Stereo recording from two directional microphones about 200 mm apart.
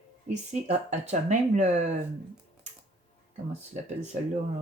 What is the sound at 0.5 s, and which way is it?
Speech, 35° right (ahead or behind).